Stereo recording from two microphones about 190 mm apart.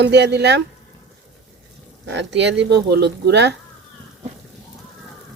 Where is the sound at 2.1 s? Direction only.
65° right (ahead or behind).